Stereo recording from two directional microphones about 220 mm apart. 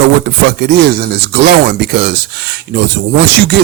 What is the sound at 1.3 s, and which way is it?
Speech, 45° right (ahead or behind).